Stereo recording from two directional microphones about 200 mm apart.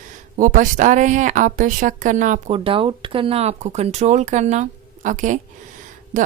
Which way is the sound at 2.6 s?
25° right (ahead or behind).